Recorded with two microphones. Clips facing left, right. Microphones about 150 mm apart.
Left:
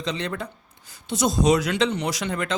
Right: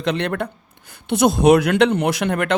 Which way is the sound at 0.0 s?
60° right (ahead or behind).